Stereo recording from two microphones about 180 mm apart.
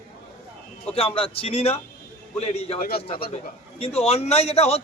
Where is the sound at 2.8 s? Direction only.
55° left (ahead or behind).